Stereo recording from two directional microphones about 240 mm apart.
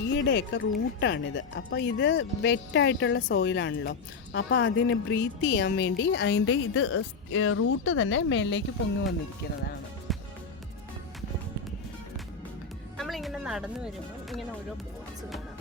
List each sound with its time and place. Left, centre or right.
0.1 s speech: left
10.1 s music: centre
13.0 s music: centre